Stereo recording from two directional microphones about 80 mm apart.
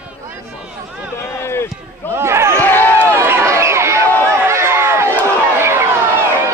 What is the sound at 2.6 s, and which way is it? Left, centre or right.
Run, left.